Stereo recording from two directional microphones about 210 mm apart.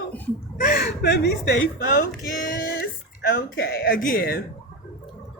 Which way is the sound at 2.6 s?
45° left (ahead or behind).